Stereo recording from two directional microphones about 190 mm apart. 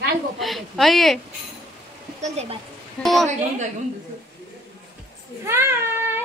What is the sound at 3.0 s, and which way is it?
Speech, centre (ahead or behind).